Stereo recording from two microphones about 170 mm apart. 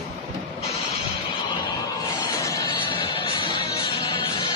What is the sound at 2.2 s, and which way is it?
Music, 20° left (ahead or behind).